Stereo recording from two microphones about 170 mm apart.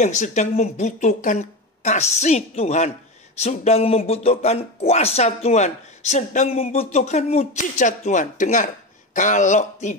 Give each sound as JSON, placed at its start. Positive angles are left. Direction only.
{"t": 0.0, "sound": "speech", "side_deg": 45}